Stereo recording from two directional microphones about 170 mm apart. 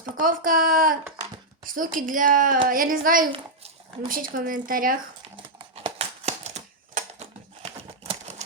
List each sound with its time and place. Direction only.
0.2 s a woman's voice: 55° right (ahead or behind)
5.4 s typewriter: 30° right (ahead or behind)